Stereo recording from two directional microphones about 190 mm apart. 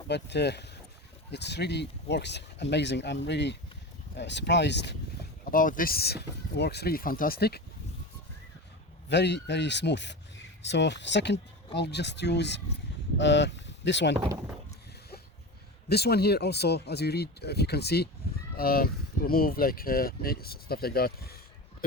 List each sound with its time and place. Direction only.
0.1 s speech: 65° left (ahead or behind)
5.5 s speech: 45° left (ahead or behind)
9.0 s speech: 65° left (ahead or behind)
15.9 s speech: 60° left (ahead or behind)